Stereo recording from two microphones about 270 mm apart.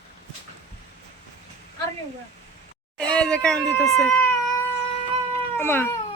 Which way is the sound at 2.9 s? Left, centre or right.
Centre.